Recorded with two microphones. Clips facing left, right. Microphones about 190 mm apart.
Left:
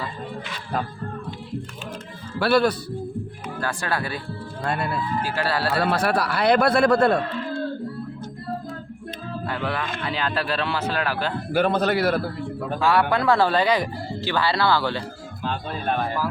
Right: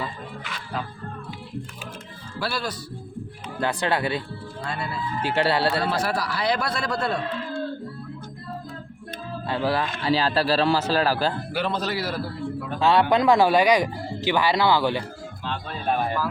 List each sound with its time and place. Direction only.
2.4 s a man's voice: 60° left (ahead or behind)
3.6 s speech: 20° right (ahead or behind)
4.6 s a man's voice: 55° left (ahead or behind)
5.2 s speech: 25° right (ahead or behind)
5.8 s a man's voice: 60° left (ahead or behind)
9.5 s speech: 30° right (ahead or behind)
11.5 s a man's voice: 55° left (ahead or behind)
12.8 s speech: 20° right (ahead or behind)